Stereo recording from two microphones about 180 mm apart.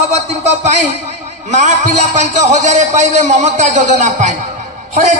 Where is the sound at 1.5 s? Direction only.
40° right (ahead or behind).